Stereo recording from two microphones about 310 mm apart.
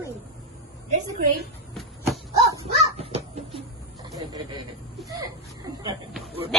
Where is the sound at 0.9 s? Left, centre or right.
Right.